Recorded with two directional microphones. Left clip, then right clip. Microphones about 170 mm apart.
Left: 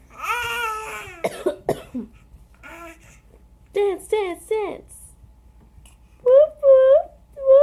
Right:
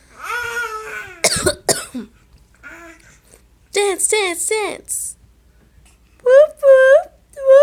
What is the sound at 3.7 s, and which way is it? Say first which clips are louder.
A woman's voice: right 4 dB; 25° right (ahead or behind).